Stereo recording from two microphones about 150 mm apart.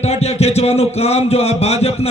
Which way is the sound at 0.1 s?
45° left (ahead or behind).